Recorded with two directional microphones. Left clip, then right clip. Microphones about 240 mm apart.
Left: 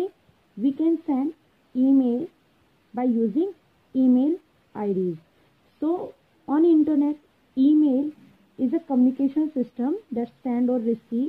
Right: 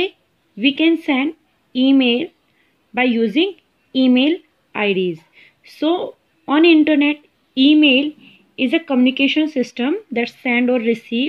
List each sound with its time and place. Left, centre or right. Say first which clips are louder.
0.6 s a woman's voice: right 8 dB; right